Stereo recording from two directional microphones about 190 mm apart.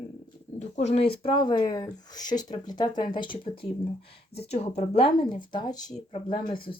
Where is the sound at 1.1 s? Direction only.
50° left (ahead or behind).